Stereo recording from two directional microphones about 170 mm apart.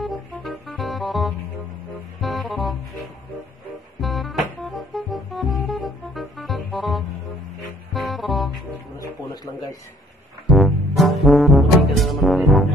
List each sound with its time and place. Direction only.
0.0 s music: centre (ahead or behind)
4.0 s music: centre (ahead or behind)
9.3 s a sound: 25° left (ahead or behind)
10.5 s music: centre (ahead or behind)